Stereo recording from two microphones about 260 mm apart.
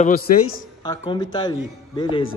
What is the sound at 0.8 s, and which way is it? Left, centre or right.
Speech, centre.